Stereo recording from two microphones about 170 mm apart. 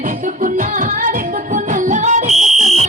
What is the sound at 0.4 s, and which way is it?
Music, 55° right (ahead or behind).